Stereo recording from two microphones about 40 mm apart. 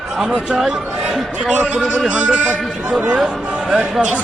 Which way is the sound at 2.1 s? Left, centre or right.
Right.